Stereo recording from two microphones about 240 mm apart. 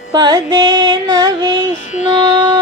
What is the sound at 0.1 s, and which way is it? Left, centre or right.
Carnatic music, centre.